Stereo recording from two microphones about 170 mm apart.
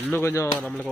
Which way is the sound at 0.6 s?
5° left (ahead or behind).